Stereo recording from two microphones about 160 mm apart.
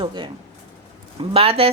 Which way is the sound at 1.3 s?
35° right (ahead or behind).